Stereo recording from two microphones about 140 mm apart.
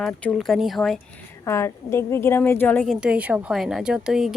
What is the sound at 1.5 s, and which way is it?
A woman's voice, 20° left (ahead or behind).